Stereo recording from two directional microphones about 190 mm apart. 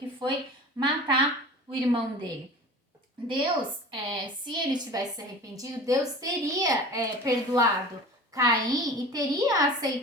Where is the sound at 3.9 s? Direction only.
25° right (ahead or behind).